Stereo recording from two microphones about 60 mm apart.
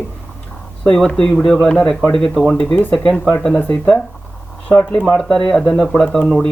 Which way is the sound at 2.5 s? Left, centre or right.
Left.